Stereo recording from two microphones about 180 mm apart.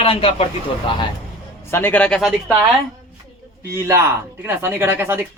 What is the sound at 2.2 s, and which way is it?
Speech, 5° right (ahead or behind).